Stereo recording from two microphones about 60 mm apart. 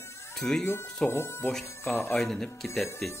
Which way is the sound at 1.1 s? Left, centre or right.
Left.